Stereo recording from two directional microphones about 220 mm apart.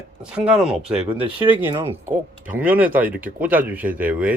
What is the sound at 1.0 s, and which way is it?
Speech, 25° right (ahead or behind).